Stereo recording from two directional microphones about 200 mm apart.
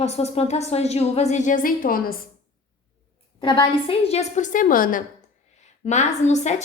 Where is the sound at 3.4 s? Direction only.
25° left (ahead or behind).